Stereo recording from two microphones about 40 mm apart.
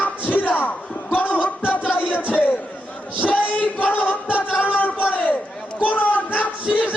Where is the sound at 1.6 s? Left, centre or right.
Left.